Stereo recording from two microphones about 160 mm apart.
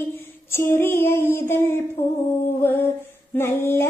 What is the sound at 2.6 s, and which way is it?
Child singing, 15° left (ahead or behind).